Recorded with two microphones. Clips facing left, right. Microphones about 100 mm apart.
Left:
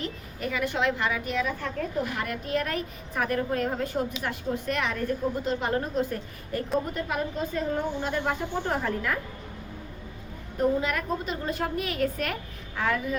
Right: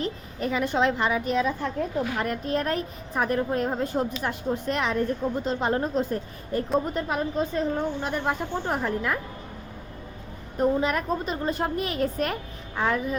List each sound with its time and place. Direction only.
0.0 s a woman's voice: 30° right (ahead or behind)
2.1 s a woman's voice: 35° right (ahead or behind)
7.9 s speech: 15° right (ahead or behind)
10.6 s a woman's voice: 30° right (ahead or behind)